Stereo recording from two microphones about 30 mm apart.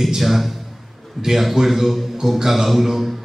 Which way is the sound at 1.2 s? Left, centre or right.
Centre.